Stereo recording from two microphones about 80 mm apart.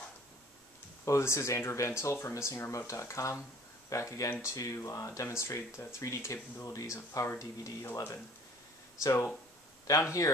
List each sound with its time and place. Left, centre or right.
1.0 s speech: left
9.0 s speech: left
9.9 s speech: left